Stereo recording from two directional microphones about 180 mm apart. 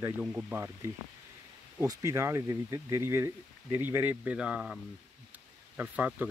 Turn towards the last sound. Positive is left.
turn(degrees=-10)  # may be behind; listen again after turning